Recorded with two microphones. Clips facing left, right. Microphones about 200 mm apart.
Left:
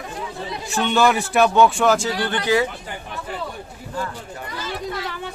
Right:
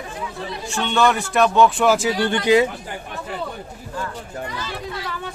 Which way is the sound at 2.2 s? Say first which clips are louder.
Right 4 dB; 20° right (ahead or behind).